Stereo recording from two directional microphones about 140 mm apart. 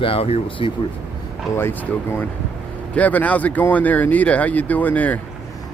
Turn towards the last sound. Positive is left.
turn(degrees=10)  # may be behind; listen again after turning